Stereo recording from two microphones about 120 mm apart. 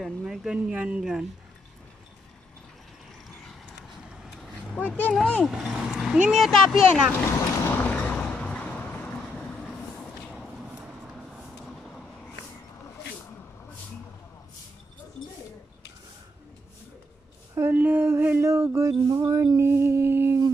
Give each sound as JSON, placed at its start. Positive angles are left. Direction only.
{"t": 0.0, "sound": "speech", "side_deg": -5}
{"t": 4.1, "sound": "vehicle", "side_deg": -5}
{"t": 4.7, "sound": "speech", "side_deg": 15}
{"t": 7.2, "sound": "a sound", "side_deg": 20}
{"t": 11.6, "sound": "vehicle", "side_deg": 0}
{"t": 17.6, "sound": "a sound", "side_deg": -15}